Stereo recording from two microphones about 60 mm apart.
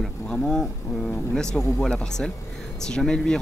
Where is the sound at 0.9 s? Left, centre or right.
Left.